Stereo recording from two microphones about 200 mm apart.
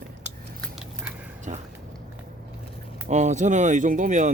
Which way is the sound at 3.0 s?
35° right (ahead or behind).